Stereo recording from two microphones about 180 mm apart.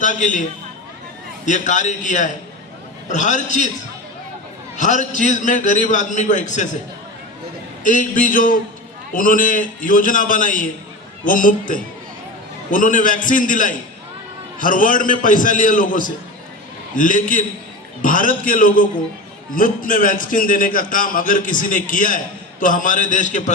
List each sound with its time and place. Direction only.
0.0 s a man's voice: 45° left (ahead or behind)
1.5 s a man's voice: 45° left (ahead or behind)
4.8 s a man's voice: 45° left (ahead or behind)
7.9 s a man's voice: 45° left (ahead or behind)
12.7 s a man's voice: 45° left (ahead or behind)